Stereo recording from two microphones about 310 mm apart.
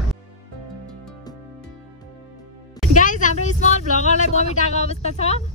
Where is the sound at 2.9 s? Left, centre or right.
Left.